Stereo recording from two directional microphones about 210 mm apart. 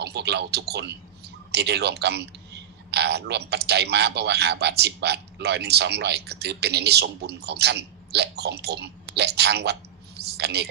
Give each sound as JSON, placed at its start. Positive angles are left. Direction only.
{"t": 0.0, "sound": "a woman's voice", "side_deg": -55}